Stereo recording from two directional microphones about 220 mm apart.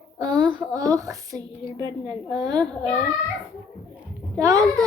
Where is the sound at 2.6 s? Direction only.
5° left (ahead or behind).